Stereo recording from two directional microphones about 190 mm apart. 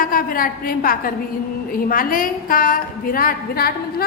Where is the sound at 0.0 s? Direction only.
50° left (ahead or behind).